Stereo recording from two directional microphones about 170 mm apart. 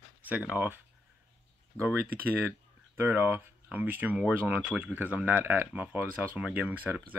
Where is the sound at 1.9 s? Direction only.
10° right (ahead or behind).